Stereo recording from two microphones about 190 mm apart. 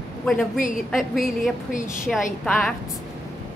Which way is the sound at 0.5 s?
45° left (ahead or behind).